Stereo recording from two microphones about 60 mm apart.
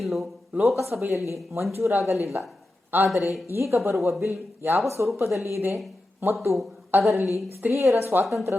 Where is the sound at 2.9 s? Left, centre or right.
Right.